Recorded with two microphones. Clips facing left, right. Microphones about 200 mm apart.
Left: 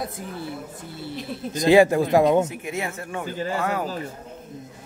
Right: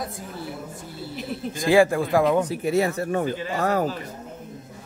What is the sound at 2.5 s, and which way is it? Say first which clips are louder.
Speech: right 8 dB; 35° right (ahead or behind).